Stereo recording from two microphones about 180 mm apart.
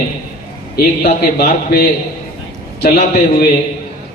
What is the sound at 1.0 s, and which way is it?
A man's voice, 55° left (ahead or behind).